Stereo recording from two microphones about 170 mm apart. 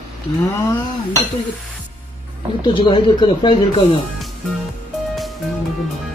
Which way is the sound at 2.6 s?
30° left (ahead or behind).